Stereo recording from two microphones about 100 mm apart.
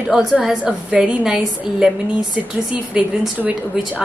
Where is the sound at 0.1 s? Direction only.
5° right (ahead or behind).